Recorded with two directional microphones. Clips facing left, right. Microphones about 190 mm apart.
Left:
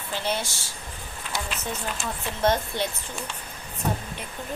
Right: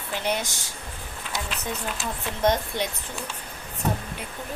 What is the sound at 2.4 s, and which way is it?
Speech, 15° right (ahead or behind).